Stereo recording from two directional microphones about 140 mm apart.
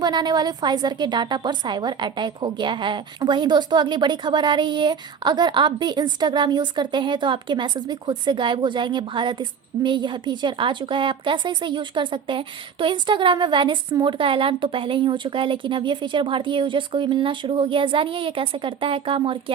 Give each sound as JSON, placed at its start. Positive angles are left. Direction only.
{"t": 0.0, "sound": "a woman's voice", "side_deg": -30}